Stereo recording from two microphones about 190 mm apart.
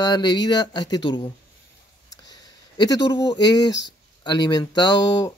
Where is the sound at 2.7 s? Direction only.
20° left (ahead or behind).